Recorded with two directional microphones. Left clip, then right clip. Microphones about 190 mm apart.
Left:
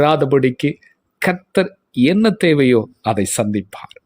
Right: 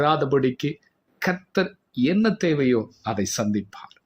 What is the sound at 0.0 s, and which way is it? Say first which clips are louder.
Speech: left 7 dB; 40° left (ahead or behind).